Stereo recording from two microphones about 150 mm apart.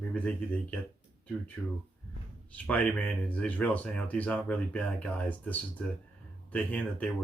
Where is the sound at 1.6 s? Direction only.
Centre (ahead or behind).